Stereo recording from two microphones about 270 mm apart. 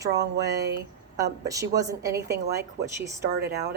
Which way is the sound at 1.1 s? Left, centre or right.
Centre.